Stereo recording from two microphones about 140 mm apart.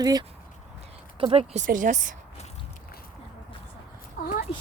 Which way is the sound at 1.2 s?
45° right (ahead or behind).